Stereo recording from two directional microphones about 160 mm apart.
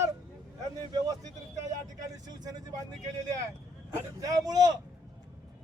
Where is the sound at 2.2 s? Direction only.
25° right (ahead or behind).